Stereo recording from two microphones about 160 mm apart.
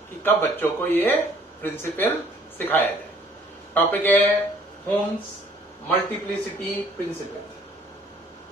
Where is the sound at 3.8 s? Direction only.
10° left (ahead or behind).